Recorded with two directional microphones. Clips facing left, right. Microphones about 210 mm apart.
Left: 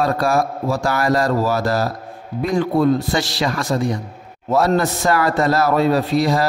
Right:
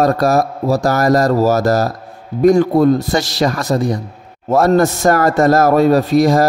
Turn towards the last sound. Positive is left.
turn(degrees=-45)  # may be behind; listen again after turning